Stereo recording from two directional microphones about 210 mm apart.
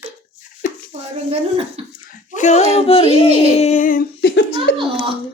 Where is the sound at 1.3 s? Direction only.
30° right (ahead or behind).